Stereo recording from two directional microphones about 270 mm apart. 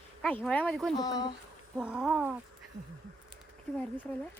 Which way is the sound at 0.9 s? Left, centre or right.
Centre.